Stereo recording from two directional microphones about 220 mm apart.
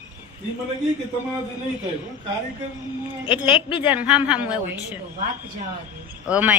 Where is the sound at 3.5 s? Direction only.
25° left (ahead or behind).